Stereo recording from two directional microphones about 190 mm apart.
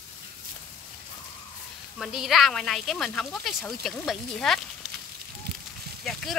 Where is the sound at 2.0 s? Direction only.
Centre (ahead or behind).